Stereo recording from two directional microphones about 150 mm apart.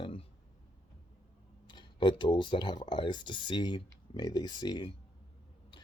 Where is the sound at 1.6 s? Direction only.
30° left (ahead or behind).